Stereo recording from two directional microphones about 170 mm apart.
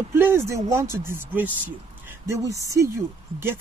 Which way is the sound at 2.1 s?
15° right (ahead or behind).